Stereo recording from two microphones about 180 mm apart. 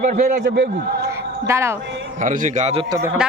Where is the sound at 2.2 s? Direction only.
45° right (ahead or behind).